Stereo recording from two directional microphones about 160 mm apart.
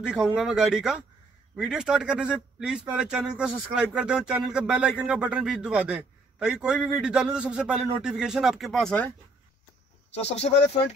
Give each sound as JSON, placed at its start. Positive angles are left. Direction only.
{"t": 0.0, "sound": "speech", "side_deg": -5}
{"t": 10.1, "sound": "speech", "side_deg": 40}